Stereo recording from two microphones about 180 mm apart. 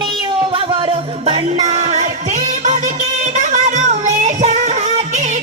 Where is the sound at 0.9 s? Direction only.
35° right (ahead or behind).